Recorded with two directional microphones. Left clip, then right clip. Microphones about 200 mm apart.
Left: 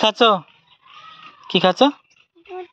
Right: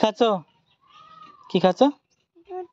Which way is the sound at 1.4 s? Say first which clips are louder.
Left 4 dB; 10° right (ahead or behind).